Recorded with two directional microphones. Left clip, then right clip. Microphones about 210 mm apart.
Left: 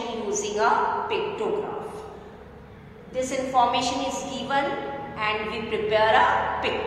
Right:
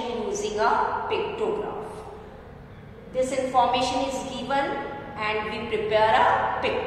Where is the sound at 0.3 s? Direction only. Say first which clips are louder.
Left 1 dB; centre (ahead or behind).